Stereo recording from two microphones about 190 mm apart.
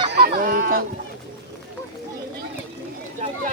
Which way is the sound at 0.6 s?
50° right (ahead or behind).